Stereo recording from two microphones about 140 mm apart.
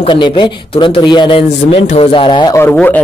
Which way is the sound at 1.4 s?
50° left (ahead or behind).